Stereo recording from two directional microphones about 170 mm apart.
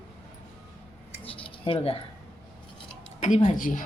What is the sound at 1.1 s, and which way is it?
Keys jangling, 30° left (ahead or behind).